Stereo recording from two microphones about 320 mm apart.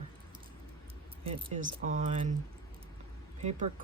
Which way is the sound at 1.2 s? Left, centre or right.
Centre.